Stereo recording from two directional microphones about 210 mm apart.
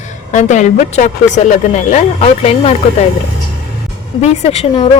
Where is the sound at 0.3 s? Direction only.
35° left (ahead or behind).